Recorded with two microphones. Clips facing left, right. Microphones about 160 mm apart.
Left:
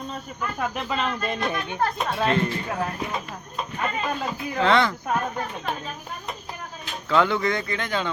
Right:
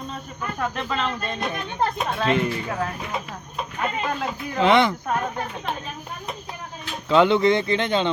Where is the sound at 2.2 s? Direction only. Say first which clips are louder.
Right 1 dB; 15° right (ahead or behind).